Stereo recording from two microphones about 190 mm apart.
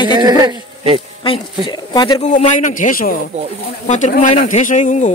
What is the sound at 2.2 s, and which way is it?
Speech, 40° left (ahead or behind).